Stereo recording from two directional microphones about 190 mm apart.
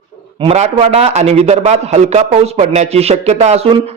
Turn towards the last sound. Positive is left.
turn(degrees=-35)  # may be behind; listen again after turning